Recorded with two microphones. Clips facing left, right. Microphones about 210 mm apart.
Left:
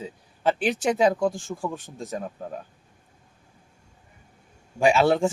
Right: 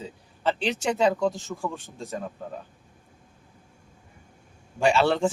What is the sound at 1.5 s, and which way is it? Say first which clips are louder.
Speech: left 1 dB; 20° left (ahead or behind).